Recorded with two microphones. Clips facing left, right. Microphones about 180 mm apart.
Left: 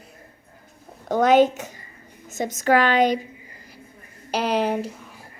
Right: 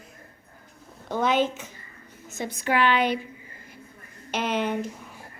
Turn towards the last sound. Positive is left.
turn(degrees=35)  # may be behind; listen again after turning